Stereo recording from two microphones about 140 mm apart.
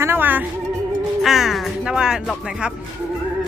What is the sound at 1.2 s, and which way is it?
Speech, 5° right (ahead or behind).